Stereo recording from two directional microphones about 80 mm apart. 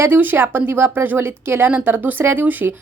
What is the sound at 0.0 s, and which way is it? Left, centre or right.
A woman's voice, right.